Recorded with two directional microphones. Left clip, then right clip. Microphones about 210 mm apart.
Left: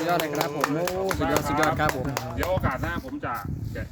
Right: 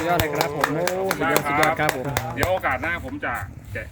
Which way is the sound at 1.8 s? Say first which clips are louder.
Right 3 dB; 55° right (ahead or behind).